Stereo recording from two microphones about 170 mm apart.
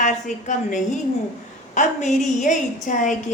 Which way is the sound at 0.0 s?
45° left (ahead or behind).